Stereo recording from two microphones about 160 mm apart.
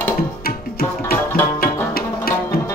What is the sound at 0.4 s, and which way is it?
Tabla, 70° left (ahead or behind).